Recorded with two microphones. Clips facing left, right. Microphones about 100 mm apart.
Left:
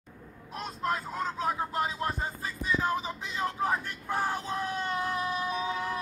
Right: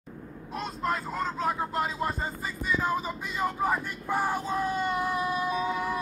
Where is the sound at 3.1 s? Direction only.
10° right (ahead or behind).